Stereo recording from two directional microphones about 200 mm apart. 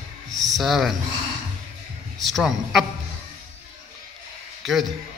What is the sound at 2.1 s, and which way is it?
Speech, centre (ahead or behind).